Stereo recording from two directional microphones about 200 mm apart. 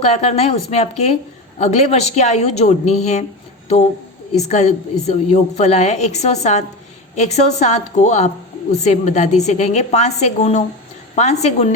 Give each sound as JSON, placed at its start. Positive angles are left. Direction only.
{"t": 0.0, "sound": "a woman's voice", "side_deg": 35}
{"t": 4.4, "sound": "a woman's voice", "side_deg": 35}